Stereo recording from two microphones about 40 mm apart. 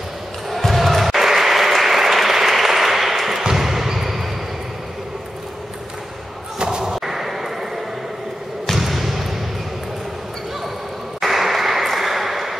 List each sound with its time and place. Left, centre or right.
0.5 s applause: centre
3.4 s basketball bounce: centre
6.6 s slam: centre
7.0 s a sound: centre
8.7 s basketball bounce: centre
11.1 s a sound: centre